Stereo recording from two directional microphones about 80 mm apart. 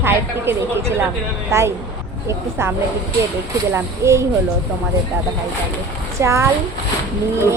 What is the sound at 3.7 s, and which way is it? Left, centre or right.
Speech, right.